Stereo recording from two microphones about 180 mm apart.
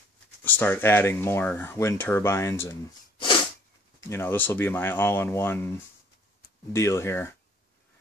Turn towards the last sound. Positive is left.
turn(degrees=15)  # may be behind; listen again after turning